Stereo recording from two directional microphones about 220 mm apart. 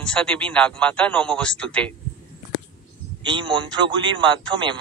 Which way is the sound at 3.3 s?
20° right (ahead or behind).